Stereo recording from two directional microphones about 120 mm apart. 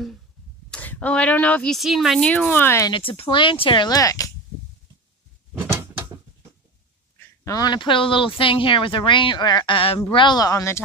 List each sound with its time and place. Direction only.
0.7 s speech: 10° left (ahead or behind)
2.9 s speech: 50° left (ahead or behind); by 4.3 s 30° left (ahead or behind)
5.5 s a sound: 15° right (ahead or behind)
7.4 s speech: 35° left (ahead or behind)